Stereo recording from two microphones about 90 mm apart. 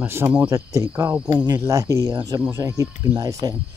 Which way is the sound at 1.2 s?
50° right (ahead or behind).